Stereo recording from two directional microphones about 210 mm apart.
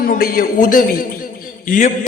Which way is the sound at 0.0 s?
45° left (ahead or behind).